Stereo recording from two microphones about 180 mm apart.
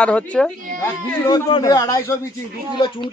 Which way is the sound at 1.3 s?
25° left (ahead or behind).